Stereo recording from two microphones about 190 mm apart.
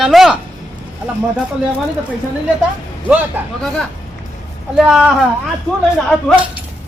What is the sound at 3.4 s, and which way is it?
Speech, 10° right (ahead or behind).